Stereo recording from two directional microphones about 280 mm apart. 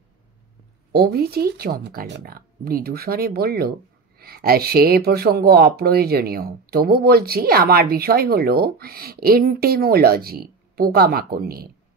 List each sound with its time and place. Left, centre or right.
0.9 s speech: right